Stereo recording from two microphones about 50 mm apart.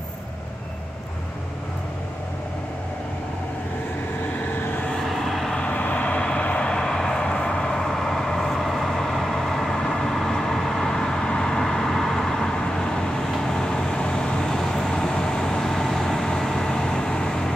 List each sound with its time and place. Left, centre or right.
5.0 s vehicle: centre
5.6 s vehicle: left
6.7 s vehicle: centre